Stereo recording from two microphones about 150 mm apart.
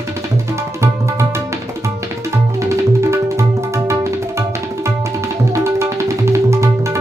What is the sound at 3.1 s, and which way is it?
Tabla, 20° right (ahead or behind).